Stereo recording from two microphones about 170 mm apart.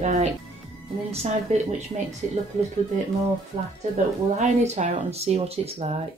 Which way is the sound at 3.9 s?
40° right (ahead or behind).